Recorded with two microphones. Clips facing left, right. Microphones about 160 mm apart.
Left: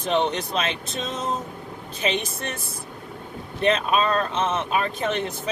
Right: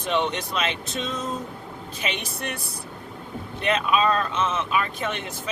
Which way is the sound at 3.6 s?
35° left (ahead or behind).